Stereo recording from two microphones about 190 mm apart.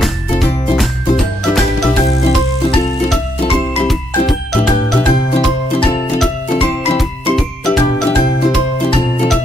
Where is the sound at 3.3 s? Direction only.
30° left (ahead or behind).